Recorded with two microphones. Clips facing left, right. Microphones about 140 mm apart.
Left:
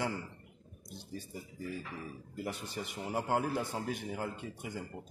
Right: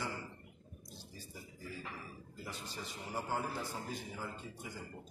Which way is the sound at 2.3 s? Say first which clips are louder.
Left 8 dB; 60° left (ahead or behind).